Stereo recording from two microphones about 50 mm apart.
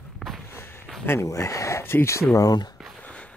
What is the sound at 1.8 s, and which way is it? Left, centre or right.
Speech, left.